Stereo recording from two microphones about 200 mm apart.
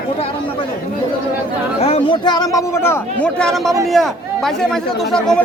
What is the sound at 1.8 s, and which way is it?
Speech, 25° left (ahead or behind).